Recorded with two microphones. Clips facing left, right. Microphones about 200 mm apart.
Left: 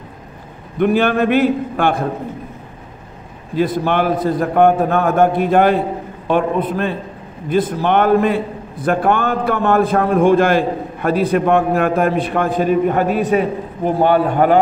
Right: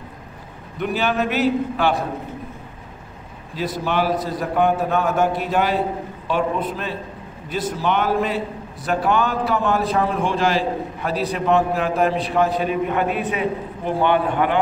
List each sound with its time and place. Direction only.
0.7 s a man's voice: 55° left (ahead or behind)
3.5 s a man's voice: 55° left (ahead or behind)